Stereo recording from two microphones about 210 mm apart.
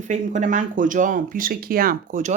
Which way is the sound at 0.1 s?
35° right (ahead or behind).